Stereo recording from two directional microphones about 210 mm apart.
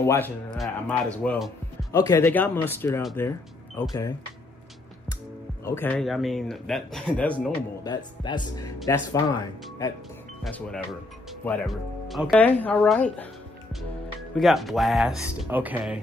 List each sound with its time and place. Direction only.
0.0 s speech: 10° left (ahead or behind)
1.9 s speech: 15° left (ahead or behind)
5.8 s speech: 5° left (ahead or behind)
7.8 s speech: 20° left (ahead or behind)
10.4 s speech: centre (ahead or behind)
14.3 s speech: centre (ahead or behind)